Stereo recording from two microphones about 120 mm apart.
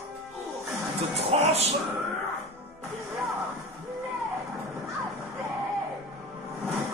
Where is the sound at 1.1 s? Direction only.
60° right (ahead or behind).